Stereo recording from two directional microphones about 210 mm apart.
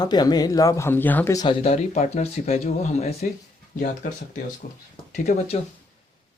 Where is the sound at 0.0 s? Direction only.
20° left (ahead or behind).